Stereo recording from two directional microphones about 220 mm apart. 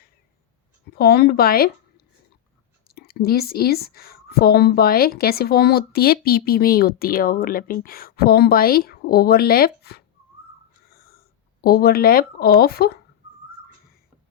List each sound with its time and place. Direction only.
0.9 s a woman's voice: 45° left (ahead or behind)
2.8 s a woman's voice: 45° left (ahead or behind)
11.6 s a woman's voice: 45° left (ahead or behind)